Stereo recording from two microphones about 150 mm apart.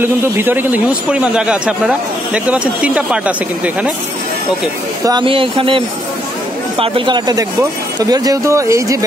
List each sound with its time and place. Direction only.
0.0 s speech: 15° right (ahead or behind)
5.0 s speech: 30° right (ahead or behind)